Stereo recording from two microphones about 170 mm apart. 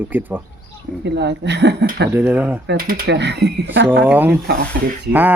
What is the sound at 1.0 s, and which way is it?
Speech, 90° right.